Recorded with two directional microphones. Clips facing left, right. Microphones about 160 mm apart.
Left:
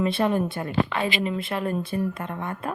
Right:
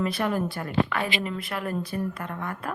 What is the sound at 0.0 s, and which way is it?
Speech, 25° left (ahead or behind).